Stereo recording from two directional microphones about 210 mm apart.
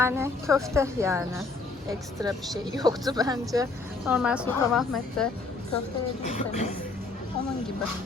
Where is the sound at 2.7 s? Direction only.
20° right (ahead or behind).